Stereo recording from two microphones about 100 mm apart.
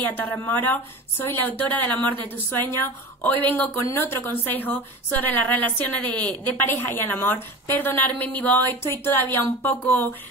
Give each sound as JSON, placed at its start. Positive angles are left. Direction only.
{"t": 0.0, "sound": "a woman's voice", "side_deg": 20}